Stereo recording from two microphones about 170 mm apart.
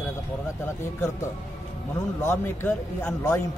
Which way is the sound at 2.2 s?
10° left (ahead or behind).